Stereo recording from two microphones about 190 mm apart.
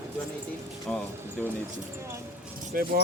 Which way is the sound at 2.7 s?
50° right (ahead or behind).